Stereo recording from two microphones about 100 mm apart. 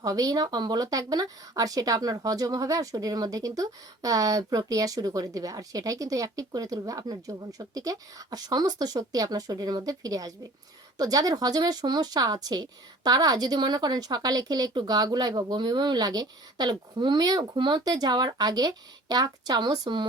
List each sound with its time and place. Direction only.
0.0 s a woman's voice: 35° right (ahead or behind)